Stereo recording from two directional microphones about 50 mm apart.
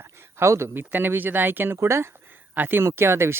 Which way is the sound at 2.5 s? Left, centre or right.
Right.